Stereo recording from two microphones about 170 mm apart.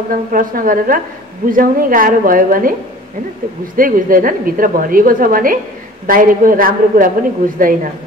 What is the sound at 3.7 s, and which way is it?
A woman's voice, 55° right (ahead or behind).